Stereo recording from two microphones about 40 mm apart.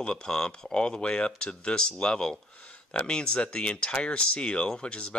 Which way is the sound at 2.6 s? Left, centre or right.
Left.